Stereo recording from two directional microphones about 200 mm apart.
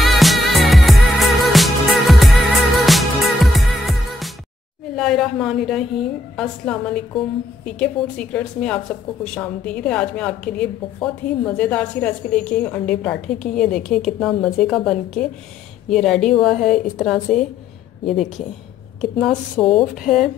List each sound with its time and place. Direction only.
0.0 s music: centre (ahead or behind)
4.9 s a woman's voice: centre (ahead or behind)